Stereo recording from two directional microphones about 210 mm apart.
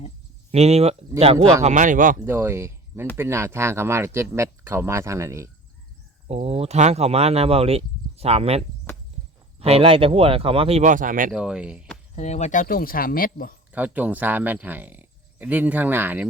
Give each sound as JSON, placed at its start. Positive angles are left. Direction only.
{"t": 0.5, "sound": "speech", "side_deg": -30}
{"t": 2.2, "sound": "speech", "side_deg": -10}
{"t": 6.2, "sound": "speech", "side_deg": -30}
{"t": 11.3, "sound": "speech", "side_deg": -5}
{"t": 12.1, "sound": "speech", "side_deg": 35}
{"t": 13.7, "sound": "speech", "side_deg": -5}